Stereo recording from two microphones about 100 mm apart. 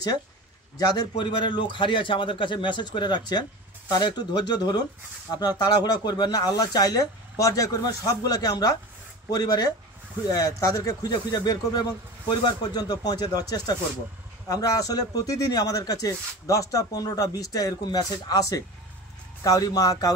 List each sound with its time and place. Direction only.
0.7 s a man's voice: 40° left (ahead or behind)